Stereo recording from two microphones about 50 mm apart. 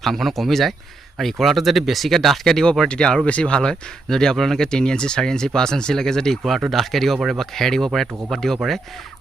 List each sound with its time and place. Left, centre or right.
0.0 s speech: centre
2.9 s speech: centre